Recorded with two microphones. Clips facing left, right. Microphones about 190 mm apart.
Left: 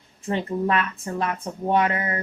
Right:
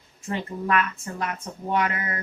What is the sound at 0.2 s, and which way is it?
Speech, 30° left (ahead or behind).